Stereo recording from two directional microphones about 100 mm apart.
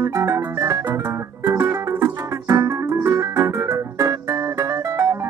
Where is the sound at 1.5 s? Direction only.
25° right (ahead or behind).